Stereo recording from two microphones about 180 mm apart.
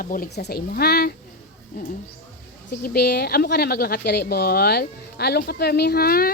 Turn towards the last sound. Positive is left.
turn(degrees=55)  # may be behind; listen again after turning